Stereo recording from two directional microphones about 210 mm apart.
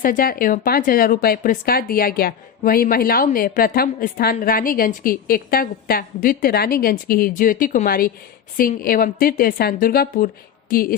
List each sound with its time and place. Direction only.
0.0 s speech: 40° left (ahead or behind)